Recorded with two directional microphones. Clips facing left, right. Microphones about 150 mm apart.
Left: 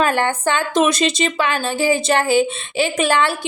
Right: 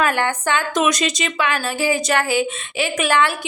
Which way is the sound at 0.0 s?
30° left (ahead or behind).